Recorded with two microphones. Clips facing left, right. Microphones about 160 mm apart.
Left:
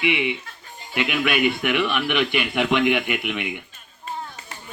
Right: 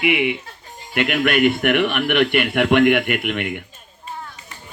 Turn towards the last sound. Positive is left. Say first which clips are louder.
# right 4 dB
turn(degrees=-60)  # may be behind; listen again after turning